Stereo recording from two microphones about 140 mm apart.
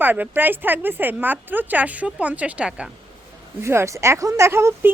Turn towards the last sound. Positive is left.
turn(degrees=-20)  # may be behind; listen again after turning